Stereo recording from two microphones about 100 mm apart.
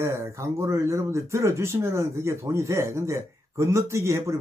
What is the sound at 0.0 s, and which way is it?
Speech, 30° right (ahead or behind).